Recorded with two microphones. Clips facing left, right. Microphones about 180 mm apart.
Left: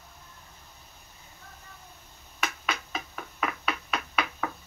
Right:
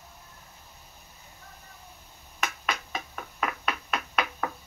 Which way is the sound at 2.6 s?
Centre (ahead or behind).